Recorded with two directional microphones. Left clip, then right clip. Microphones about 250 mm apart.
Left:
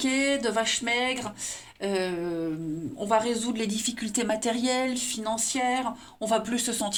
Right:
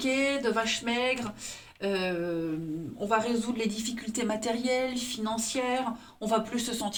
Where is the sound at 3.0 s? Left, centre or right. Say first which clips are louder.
Left 3 dB; left.